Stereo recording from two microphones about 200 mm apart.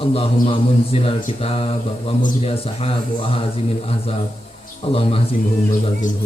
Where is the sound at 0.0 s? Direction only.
30° left (ahead or behind).